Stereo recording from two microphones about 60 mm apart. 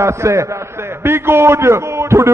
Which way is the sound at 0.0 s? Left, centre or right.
Right.